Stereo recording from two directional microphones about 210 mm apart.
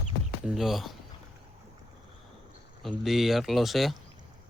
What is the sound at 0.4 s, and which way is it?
Speech, centre (ahead or behind).